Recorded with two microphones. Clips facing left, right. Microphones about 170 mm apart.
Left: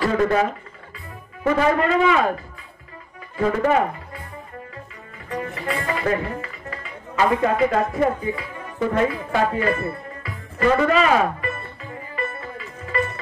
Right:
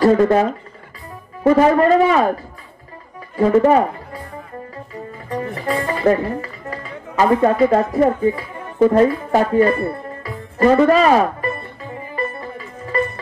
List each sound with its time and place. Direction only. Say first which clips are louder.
0.0 s speech: right 6 dB; 40° right (ahead or behind)
3.3 s speech: right 6 dB; 35° right (ahead or behind)
5.3 s speech: right 5 dB; 35° right (ahead or behind)
12.2 s music: right 4 dB; 40° right (ahead or behind)